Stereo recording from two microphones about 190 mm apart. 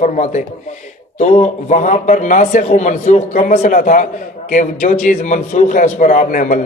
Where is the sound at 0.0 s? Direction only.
40° left (ahead or behind).